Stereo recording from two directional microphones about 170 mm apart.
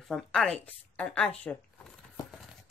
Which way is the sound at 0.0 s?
Centre (ahead or behind).